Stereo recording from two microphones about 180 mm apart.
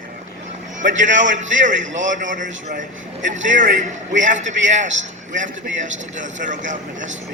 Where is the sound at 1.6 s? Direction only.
45° right (ahead or behind).